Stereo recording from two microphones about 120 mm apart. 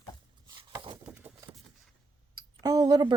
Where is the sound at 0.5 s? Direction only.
40° right (ahead or behind).